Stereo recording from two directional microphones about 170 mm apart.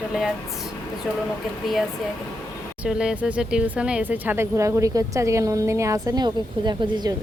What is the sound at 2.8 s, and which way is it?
Speech, 5° right (ahead or behind).